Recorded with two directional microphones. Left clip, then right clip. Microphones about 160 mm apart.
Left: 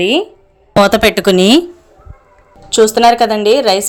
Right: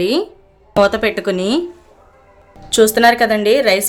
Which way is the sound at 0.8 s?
50° left (ahead or behind).